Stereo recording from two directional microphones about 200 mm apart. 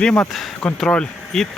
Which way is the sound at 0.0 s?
5° left (ahead or behind).